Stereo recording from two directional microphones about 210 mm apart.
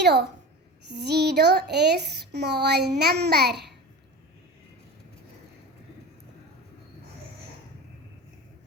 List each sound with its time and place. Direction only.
0.0 s speech: 55° right (ahead or behind)